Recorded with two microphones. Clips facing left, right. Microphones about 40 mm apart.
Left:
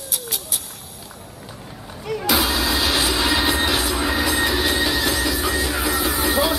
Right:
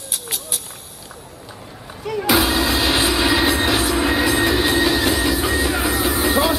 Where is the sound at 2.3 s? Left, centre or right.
Right.